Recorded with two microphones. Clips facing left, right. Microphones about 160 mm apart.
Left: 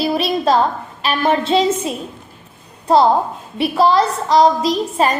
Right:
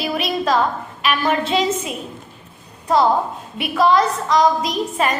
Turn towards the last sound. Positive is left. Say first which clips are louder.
# left 4 dB
turn(degrees=30)  # may be behind; listen again after turning